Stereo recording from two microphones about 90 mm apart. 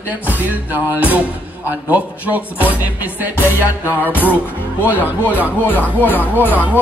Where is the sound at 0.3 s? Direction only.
20° right (ahead or behind).